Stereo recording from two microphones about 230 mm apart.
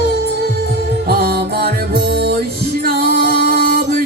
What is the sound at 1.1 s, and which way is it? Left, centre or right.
Music, right.